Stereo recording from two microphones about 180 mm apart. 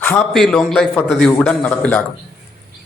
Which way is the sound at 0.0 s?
5° left (ahead or behind).